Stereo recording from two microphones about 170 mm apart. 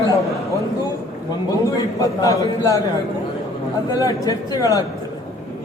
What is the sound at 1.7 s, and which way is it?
A man's voice, 20° left (ahead or behind).